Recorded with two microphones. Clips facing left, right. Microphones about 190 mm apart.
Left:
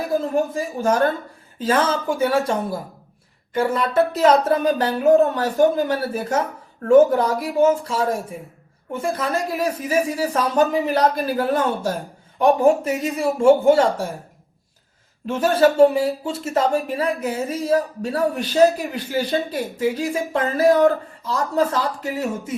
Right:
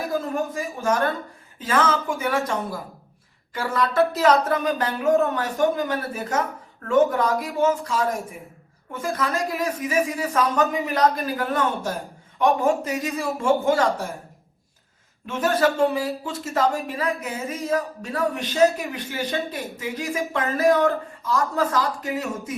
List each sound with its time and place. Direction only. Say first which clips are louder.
0.1 s speech: left 8 dB; 30° left (ahead or behind)
15.4 s speech: left 6 dB; 30° left (ahead or behind)